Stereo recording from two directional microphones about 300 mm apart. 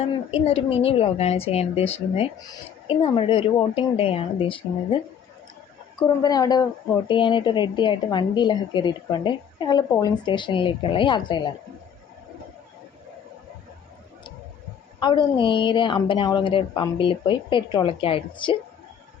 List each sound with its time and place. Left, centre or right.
0.0 s a woman's voice: centre
6.1 s a woman's voice: centre
15.0 s a woman's voice: centre